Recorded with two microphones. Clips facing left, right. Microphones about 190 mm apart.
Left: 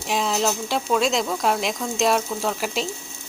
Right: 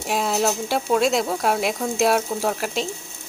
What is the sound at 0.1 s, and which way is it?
Speech, 5° right (ahead or behind).